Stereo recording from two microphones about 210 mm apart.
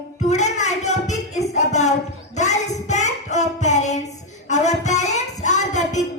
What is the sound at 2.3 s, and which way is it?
Child singing, 35° left (ahead or behind).